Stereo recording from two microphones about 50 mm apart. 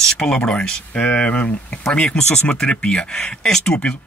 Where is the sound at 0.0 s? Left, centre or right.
Centre.